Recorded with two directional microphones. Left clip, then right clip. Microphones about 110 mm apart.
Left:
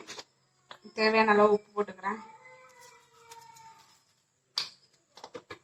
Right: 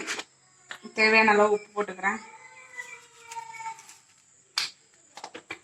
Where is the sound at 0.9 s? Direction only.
35° right (ahead or behind).